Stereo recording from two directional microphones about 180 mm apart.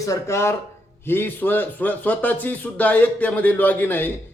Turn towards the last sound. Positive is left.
turn(degrees=10)  # may be behind; listen again after turning